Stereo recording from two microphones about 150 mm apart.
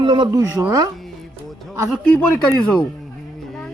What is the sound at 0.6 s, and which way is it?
Speech, 20° right (ahead or behind).